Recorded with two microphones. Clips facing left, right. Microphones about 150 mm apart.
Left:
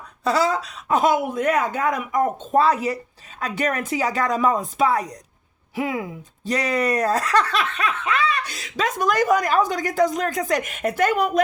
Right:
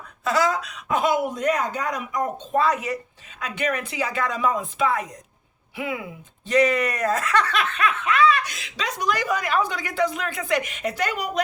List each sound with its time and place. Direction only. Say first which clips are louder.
0.3 s speech: left 2 dB; 30° left (ahead or behind)
1.4 s speech: left 3 dB; 55° left (ahead or behind)
2.6 s speech: left 4 dB; 35° left (ahead or behind); by 11.3 s 50° left (ahead or behind)